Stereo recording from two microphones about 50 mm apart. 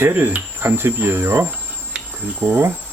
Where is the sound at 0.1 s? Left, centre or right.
Right.